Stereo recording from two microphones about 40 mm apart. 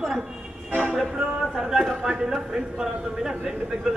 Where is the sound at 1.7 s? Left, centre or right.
Centre.